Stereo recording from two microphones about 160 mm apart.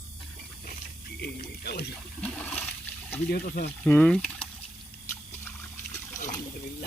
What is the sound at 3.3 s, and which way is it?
Speech, 70° left (ahead or behind).